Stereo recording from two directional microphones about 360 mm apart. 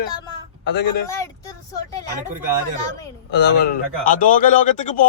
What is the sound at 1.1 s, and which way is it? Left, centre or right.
Vehicle, centre.